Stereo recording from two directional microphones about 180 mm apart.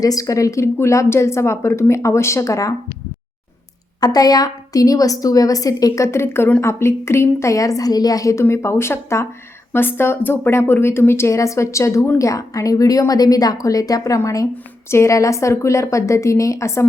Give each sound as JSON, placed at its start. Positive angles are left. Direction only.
{"t": 0.0, "sound": "speech", "side_deg": 20}
{"t": 4.0, "sound": "a woman's voice", "side_deg": 20}